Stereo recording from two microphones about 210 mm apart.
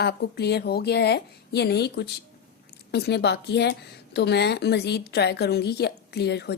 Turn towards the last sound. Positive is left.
turn(degrees=50)  # may be behind; listen again after turning